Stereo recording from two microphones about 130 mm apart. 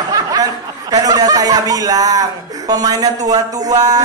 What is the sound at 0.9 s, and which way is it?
A man's voice, 30° right (ahead or behind).